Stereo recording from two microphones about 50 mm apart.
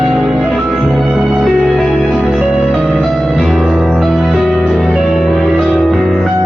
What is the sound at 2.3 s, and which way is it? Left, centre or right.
Music, centre.